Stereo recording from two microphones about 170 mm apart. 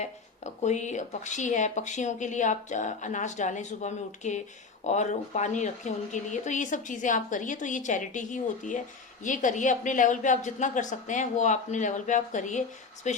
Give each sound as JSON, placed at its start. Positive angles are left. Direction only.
{"t": 0.6, "sound": "speech", "side_deg": 45}